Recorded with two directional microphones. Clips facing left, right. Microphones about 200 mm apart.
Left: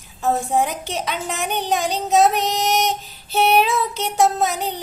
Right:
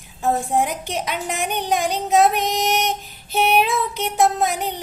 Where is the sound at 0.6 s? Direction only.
15° right (ahead or behind).